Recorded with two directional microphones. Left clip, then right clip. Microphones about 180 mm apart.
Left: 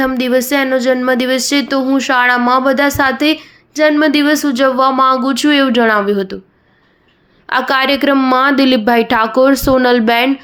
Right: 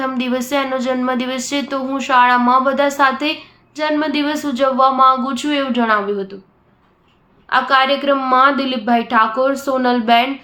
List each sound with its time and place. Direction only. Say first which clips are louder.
0.0 s speech: left 7 dB; 30° left (ahead or behind)
7.5 s speech: left 1 dB; 45° left (ahead or behind)